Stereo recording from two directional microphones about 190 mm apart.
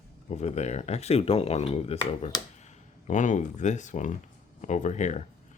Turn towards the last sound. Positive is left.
turn(degrees=40)  # may be behind; listen again after turning